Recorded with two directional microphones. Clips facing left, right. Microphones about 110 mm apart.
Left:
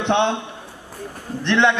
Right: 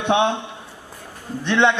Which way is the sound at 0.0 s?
10° right (ahead or behind).